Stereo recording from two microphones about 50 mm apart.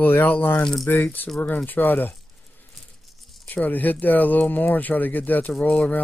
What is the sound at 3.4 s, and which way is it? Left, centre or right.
Speech, left.